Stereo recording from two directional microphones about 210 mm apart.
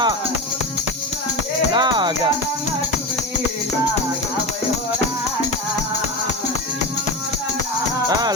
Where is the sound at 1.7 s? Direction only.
20° right (ahead or behind).